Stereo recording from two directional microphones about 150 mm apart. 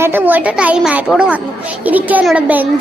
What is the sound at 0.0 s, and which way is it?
A woman's voice, 15° right (ahead or behind).